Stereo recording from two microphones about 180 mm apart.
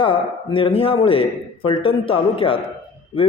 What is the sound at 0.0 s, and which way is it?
A man's voice, 30° left (ahead or behind).